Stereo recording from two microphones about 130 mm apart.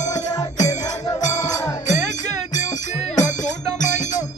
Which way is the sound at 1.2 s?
65° left (ahead or behind).